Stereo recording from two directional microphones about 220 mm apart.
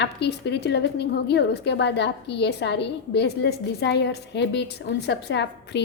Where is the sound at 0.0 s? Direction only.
50° left (ahead or behind).